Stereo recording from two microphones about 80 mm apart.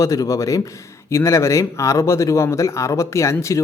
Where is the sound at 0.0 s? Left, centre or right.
Left.